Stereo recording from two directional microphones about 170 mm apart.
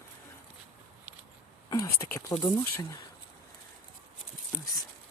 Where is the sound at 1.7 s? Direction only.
20° left (ahead or behind).